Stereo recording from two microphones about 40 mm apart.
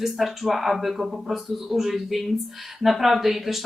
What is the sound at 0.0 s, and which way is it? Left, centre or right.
Speech, centre.